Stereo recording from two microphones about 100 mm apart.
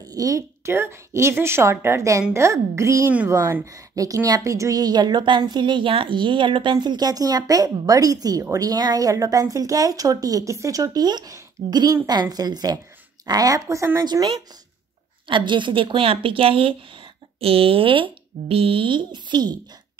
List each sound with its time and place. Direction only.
0.0 s a woman's voice: 35° right (ahead or behind)
14.0 s speech: 45° right (ahead or behind)